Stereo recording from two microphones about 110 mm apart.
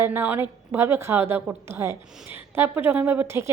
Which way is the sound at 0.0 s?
20° right (ahead or behind).